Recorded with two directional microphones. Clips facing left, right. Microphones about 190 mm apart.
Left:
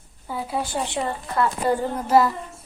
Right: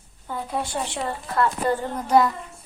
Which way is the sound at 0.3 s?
5° left (ahead or behind).